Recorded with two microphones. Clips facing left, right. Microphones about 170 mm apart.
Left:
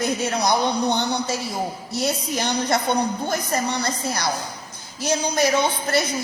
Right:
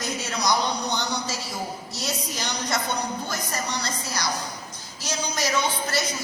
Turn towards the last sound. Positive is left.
turn(degrees=55)  # may be behind; listen again after turning